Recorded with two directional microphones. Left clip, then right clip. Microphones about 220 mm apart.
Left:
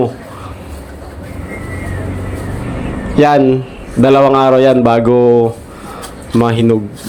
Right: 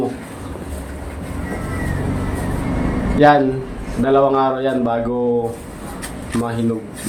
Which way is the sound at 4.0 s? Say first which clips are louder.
Left 6 dB; 35° left (ahead or behind).